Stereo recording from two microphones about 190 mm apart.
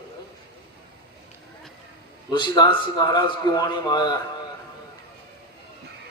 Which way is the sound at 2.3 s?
25° left (ahead or behind).